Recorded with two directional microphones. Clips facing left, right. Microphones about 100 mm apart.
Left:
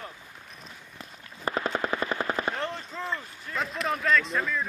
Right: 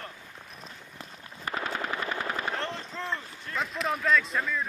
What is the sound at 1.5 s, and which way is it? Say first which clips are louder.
Machine gun: left 4 dB; 30° left (ahead or behind).